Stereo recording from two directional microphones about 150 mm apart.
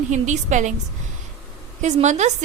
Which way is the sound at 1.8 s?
50° right (ahead or behind).